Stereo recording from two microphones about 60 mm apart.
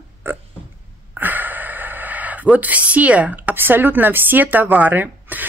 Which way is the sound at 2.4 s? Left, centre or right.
Right.